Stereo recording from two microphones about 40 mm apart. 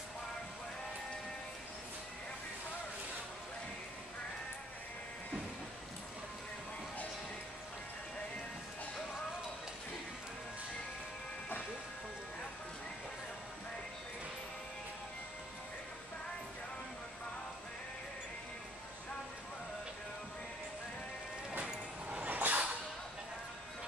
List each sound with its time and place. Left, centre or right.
22.2 s dog: right